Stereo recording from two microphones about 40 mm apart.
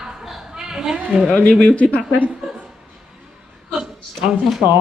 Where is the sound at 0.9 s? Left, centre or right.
Right.